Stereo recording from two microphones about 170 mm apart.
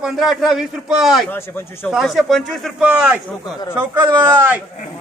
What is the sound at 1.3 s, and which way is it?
Speech, 10° left (ahead or behind).